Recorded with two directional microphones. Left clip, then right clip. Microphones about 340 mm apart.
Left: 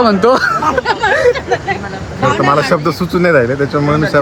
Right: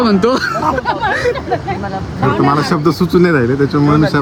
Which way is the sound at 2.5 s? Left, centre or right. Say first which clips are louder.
Left 2 dB; centre.